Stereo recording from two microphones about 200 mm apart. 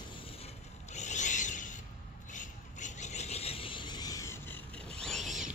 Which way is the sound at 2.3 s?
40° left (ahead or behind).